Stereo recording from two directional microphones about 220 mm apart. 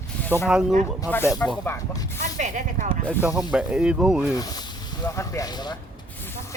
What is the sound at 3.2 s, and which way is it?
Speech, 5° right (ahead or behind).